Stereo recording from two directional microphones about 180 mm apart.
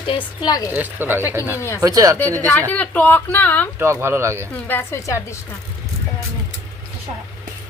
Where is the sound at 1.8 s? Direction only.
20° right (ahead or behind).